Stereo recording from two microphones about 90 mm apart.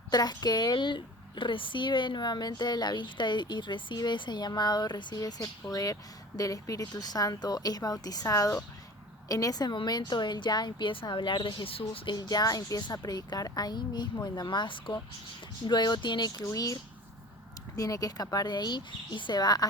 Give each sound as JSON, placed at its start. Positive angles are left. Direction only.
{"t": 0.1, "sound": "a woman's voice", "side_deg": 45}
{"t": 5.7, "sound": "a woman's voice", "side_deg": 40}
{"t": 12.1, "sound": "a woman's voice", "side_deg": 50}
{"t": 16.4, "sound": "a woman's voice", "side_deg": 40}
{"t": 17.7, "sound": "a woman's voice", "side_deg": 40}